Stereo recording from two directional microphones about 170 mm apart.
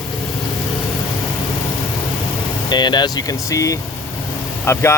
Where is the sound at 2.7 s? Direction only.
25° left (ahead or behind).